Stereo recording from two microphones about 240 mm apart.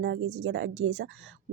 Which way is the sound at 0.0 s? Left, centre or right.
Right.